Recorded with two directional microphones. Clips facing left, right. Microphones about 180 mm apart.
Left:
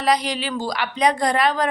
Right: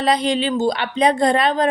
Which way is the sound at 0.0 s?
25° right (ahead or behind).